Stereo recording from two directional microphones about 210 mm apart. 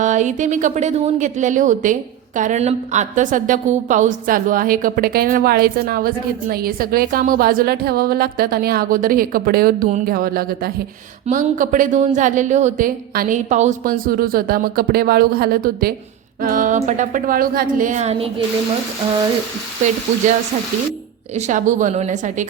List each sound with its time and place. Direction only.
0.0 s a woman's voice: 35° right (ahead or behind)
21.3 s a woman's voice: 35° right (ahead or behind)